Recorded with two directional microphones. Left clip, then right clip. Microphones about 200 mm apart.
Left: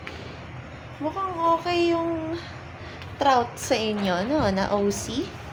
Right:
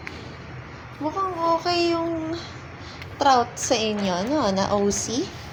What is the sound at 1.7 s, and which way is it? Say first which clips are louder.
Speech: right 1 dB; 15° right (ahead or behind).